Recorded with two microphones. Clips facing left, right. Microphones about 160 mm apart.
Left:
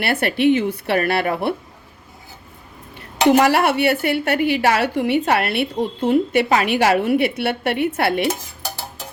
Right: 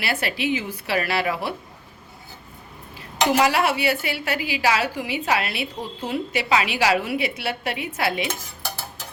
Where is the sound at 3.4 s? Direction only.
60° left (ahead or behind).